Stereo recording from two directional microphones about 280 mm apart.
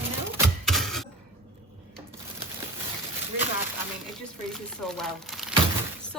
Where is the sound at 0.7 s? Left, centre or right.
Centre.